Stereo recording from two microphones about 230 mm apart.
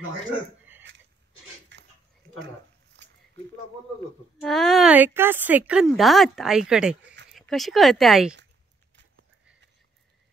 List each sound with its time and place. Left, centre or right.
1.7 s dog: right
4.4 s a woman's voice: centre
8.9 s a sound: right